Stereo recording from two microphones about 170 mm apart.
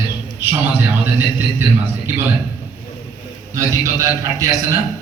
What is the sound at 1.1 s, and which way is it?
A man's voice, 15° right (ahead or behind).